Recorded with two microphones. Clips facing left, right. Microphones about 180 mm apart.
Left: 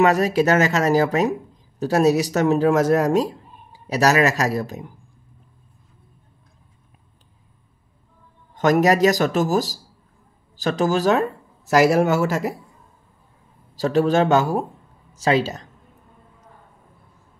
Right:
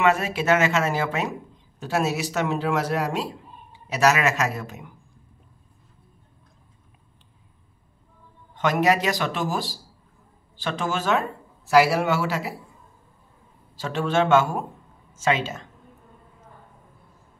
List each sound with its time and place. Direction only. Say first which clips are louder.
0.0 s speech: left 5 dB; 40° left (ahead or behind)
8.5 s speech: left 5 dB; 40° left (ahead or behind)
13.7 s speech: left 6 dB; 40° left (ahead or behind)